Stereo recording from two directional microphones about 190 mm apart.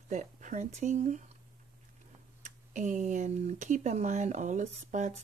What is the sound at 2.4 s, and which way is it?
Speech, 40° right (ahead or behind).